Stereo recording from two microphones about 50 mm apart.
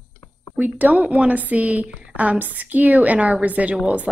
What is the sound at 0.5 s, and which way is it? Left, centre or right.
A woman's voice, right.